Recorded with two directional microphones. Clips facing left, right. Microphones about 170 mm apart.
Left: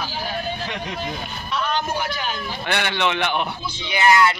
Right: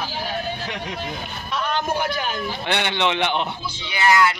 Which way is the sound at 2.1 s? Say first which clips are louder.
Right 2 dB; 50° right (ahead or behind).